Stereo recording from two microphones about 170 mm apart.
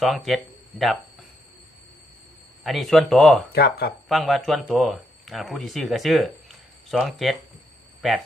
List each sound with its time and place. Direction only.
0.0 s speech: centre (ahead or behind)
2.6 s speech: centre (ahead or behind)
3.5 s speech: 65° left (ahead or behind)
4.1 s speech: centre (ahead or behind)